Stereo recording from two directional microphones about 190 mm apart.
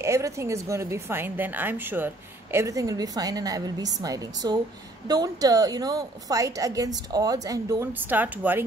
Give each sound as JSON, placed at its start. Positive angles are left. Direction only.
{"t": 0.0, "sound": "a woman's voice", "side_deg": -15}